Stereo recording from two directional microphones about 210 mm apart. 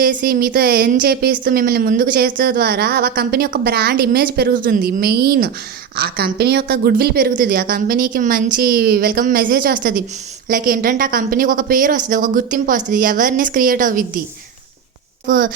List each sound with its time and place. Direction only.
0.0 s a woman's voice: 45° right (ahead or behind)
15.3 s a woman's voice: 40° right (ahead or behind)